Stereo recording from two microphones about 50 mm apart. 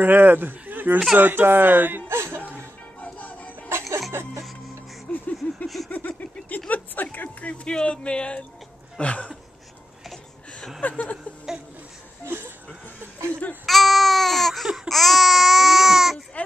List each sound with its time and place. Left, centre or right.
0.0 s speech: right
2.0 s chuckle: right
3.0 s music: left
4.1 s music: right
5.1 s a sound: left
6.7 s speech: left
10.8 s speech: left
12.3 s a sound: right
13.3 s a sound: left
13.7 s baby cry: centre
14.9 s babbling: centre